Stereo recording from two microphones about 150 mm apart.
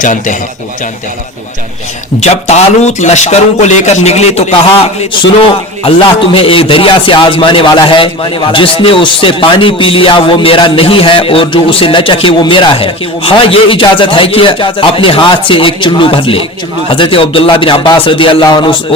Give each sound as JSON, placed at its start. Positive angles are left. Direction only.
{"t": 0.0, "sound": "a man's voice", "side_deg": 55}
{"t": 2.2, "sound": "a man's voice", "side_deg": 45}